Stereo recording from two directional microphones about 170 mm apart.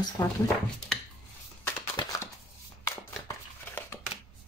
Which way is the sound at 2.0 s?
25° left (ahead or behind).